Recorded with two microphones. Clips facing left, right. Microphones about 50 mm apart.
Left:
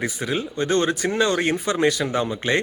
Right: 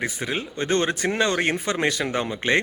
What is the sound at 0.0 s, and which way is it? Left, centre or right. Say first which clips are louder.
Speech: left 2 dB; right.